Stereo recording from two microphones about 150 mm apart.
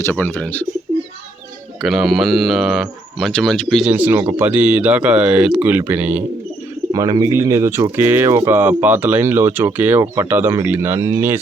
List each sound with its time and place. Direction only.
0.0 s speech: 15° left (ahead or behind)
1.8 s speech: centre (ahead or behind)
3.9 s speech: 10° right (ahead or behind)
6.9 s speech: 25° right (ahead or behind)